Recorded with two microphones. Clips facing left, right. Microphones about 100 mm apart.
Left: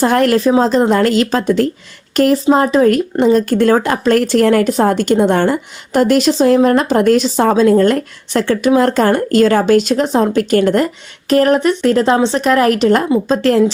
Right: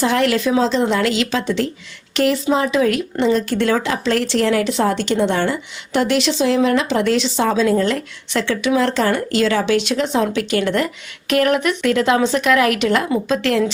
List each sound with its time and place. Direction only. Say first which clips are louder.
0.0 s a woman's voice: left 5 dB; 45° left (ahead or behind)